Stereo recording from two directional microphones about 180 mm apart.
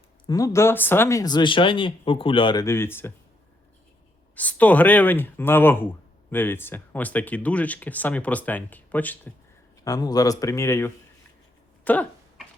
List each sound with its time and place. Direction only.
0.3 s speech: 20° left (ahead or behind)
4.4 s speech: 10° left (ahead or behind)
9.8 s speech: 20° left (ahead or behind)
11.9 s a sound: 10° left (ahead or behind)